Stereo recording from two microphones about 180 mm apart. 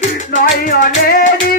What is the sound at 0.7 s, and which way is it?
Music, 50° left (ahead or behind).